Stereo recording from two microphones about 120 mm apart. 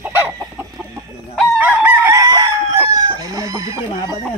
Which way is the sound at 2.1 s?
30° right (ahead or behind).